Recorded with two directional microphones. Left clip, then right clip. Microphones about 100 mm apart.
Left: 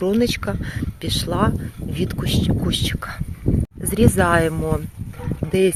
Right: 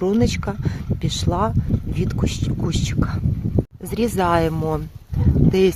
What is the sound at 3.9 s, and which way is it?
Speech, 15° right (ahead or behind).